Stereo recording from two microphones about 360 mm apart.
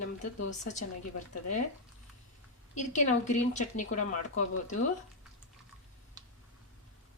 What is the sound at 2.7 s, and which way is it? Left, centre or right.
A woman's voice, centre.